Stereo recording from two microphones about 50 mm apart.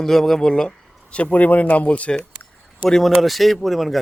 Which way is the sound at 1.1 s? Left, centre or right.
Left.